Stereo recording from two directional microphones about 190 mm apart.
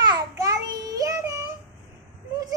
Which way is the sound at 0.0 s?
20° right (ahead or behind).